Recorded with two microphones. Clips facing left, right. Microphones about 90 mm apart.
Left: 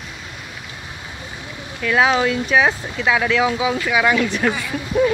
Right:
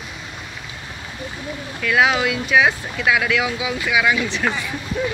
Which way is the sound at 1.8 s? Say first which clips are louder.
Left 1 dB; 30° left (ahead or behind).